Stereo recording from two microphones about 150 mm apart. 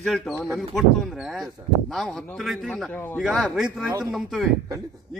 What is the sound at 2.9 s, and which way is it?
Speech, 10° left (ahead or behind).